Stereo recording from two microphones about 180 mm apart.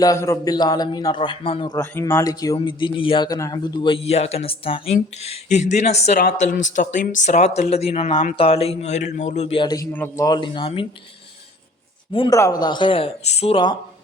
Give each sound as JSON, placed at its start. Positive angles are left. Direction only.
{"t": 0.0, "sound": "a man's voice", "side_deg": 15}
{"t": 1.8, "sound": "a man's voice", "side_deg": 10}
{"t": 9.9, "sound": "a man's voice", "side_deg": 10}
{"t": 10.2, "sound": "a man's voice", "side_deg": 25}
{"t": 12.1, "sound": "a man's voice", "side_deg": 25}